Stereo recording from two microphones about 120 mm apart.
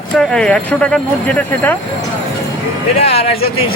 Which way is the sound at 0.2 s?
5° left (ahead or behind).